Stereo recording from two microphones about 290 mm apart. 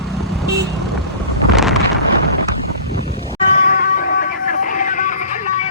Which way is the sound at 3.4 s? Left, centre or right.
Left.